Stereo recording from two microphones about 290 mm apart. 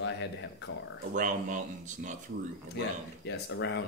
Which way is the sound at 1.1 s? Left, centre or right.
Right.